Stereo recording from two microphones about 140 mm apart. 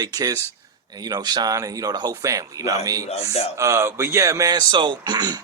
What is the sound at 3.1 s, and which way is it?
Speech, 50° left (ahead or behind).